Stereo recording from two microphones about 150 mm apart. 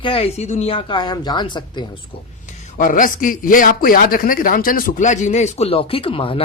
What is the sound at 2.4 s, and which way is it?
A man's voice, 60° left (ahead or behind).